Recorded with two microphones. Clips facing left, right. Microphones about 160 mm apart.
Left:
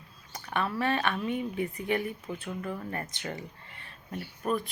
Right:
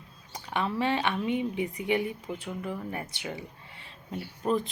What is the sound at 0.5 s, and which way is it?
Speech, 15° right (ahead or behind).